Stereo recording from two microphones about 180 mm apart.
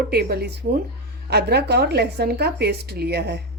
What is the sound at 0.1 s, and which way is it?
Speech, 60° right (ahead or behind).